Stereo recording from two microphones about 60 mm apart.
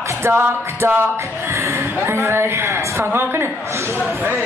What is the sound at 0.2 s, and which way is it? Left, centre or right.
Speech, right.